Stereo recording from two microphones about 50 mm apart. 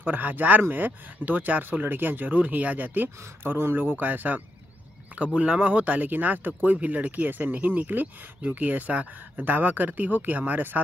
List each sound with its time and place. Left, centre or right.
0.0 s speech: right
5.4 s speech: right